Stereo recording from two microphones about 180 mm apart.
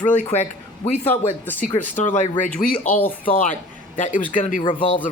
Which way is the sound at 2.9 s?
10° left (ahead or behind).